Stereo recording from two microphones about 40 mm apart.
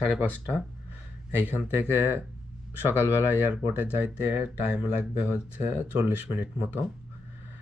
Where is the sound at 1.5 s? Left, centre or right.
Right.